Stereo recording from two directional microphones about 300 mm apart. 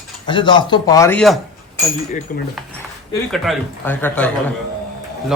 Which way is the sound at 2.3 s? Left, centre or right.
Left.